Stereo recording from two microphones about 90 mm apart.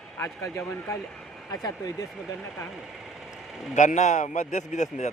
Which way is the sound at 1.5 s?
45° left (ahead or behind).